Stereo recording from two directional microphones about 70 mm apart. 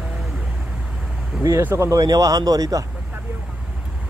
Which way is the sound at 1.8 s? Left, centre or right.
Right.